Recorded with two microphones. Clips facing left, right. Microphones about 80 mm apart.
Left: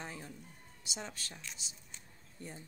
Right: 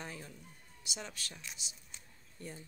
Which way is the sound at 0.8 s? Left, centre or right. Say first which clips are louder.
Left 1 dB; left.